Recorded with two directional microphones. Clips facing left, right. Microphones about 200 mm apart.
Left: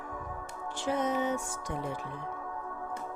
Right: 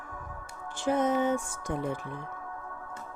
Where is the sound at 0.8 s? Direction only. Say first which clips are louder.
Right 4 dB; 50° right (ahead or behind).